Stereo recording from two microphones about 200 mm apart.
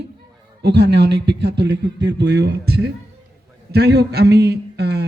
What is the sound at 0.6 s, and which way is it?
A man's voice, 55° right (ahead or behind).